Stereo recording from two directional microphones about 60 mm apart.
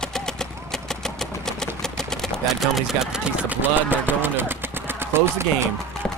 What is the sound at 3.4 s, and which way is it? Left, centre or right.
Speech, right.